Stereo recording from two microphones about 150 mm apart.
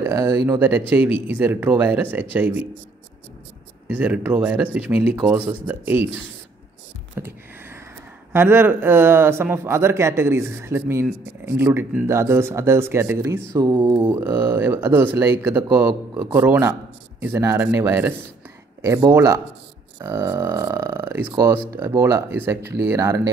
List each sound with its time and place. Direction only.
0.0 s speech: 15° right (ahead or behind)
3.8 s speech: 10° right (ahead or behind)
7.2 s a sound: 15° right (ahead or behind)
8.3 s speech: 15° right (ahead or behind)
14.0 s speech: 10° right (ahead or behind)